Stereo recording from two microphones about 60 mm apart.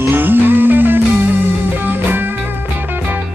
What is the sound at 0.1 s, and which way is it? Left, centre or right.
Music, right.